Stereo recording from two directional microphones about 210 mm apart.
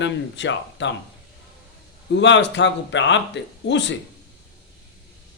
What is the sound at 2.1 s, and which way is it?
Speech, 60° left (ahead or behind).